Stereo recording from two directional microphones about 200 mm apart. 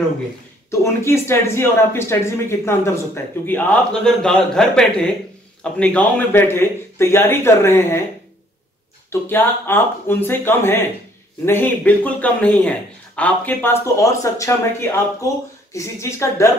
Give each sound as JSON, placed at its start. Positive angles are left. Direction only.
{"t": 0.7, "sound": "a man's voice", "side_deg": 15}
{"t": 9.1, "sound": "speech", "side_deg": 10}